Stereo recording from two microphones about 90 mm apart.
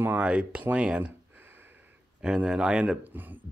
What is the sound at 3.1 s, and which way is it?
Speech, 20° right (ahead or behind).